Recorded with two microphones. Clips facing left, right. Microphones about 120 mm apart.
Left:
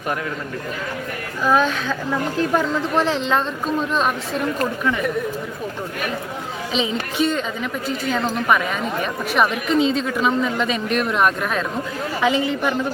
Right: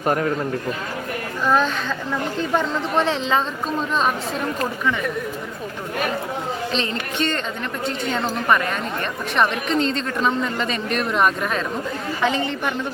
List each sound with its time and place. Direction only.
0.1 s a man's voice: 40° right (ahead or behind)
1.5 s a woman's voice: 5° left (ahead or behind)
6.7 s a woman's voice: 5° left (ahead or behind)
8.4 s a woman's voice: 5° left (ahead or behind)